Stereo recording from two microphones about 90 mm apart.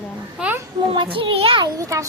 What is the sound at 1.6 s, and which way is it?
Speech, 40° right (ahead or behind).